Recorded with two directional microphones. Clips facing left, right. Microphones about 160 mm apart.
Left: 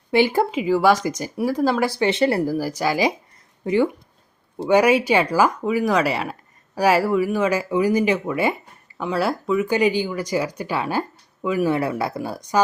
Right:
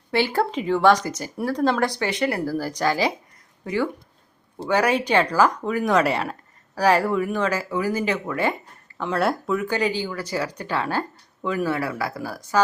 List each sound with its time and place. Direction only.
0.1 s speech: 15° left (ahead or behind)
2.0 s speech: 25° left (ahead or behind)
2.4 s speech: 15° left (ahead or behind)
3.6 s speech: 20° left (ahead or behind)
9.0 s speech: centre (ahead or behind)
9.6 s speech: 10° left (ahead or behind)
11.7 s speech: 20° left (ahead or behind)